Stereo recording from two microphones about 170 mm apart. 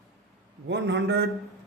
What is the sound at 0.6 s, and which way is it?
Speech, 90° right.